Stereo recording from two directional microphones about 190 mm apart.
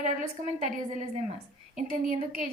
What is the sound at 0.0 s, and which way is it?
A woman's voice, 40° right (ahead or behind).